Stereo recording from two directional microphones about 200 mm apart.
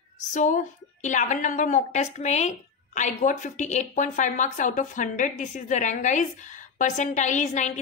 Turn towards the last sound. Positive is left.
turn(degrees=35)  # may be behind; listen again after turning